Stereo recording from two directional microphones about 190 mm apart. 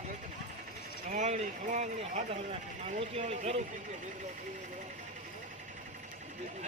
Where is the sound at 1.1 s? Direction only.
40° right (ahead or behind).